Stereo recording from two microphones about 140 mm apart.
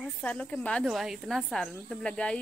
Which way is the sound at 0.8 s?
5° right (ahead or behind).